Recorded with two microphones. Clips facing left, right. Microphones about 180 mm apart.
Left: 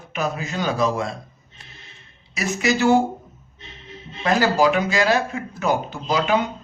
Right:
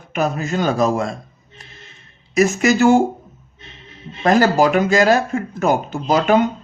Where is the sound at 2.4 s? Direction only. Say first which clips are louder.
Right 7 dB; 45° right (ahead or behind).